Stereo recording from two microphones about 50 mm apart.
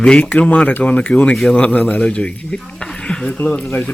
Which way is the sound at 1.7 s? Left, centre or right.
Left.